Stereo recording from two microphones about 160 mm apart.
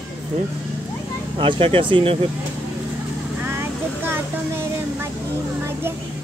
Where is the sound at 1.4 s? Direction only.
30° right (ahead or behind).